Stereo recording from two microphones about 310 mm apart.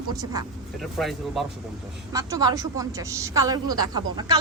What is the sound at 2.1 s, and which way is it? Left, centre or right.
A woman's voice, centre.